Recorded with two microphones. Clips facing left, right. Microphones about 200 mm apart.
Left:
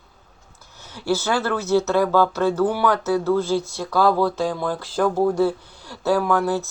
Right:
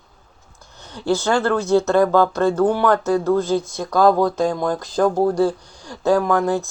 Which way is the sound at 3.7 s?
15° right (ahead or behind).